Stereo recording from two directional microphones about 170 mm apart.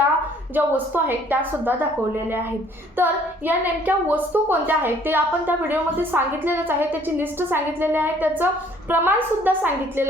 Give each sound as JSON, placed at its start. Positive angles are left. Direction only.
{"t": 0.5, "sound": "a woman's voice", "side_deg": -10}